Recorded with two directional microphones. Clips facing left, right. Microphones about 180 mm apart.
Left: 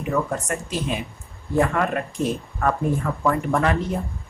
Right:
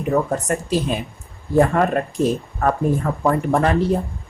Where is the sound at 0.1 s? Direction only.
35° right (ahead or behind).